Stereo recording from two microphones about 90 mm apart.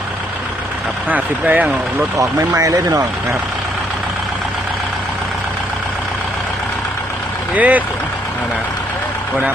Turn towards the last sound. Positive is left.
turn(degrees=-15)  # may be behind; listen again after turning